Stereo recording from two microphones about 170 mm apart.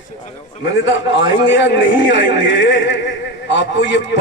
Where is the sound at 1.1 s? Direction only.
90° left.